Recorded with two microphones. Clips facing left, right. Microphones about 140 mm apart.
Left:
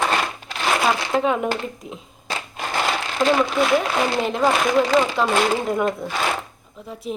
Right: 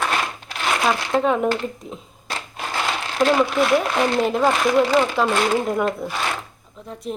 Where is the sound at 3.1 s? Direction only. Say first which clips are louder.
Right 2 dB; centre (ahead or behind).